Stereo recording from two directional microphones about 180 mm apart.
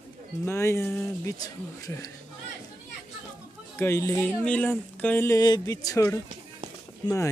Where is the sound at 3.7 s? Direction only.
15° left (ahead or behind).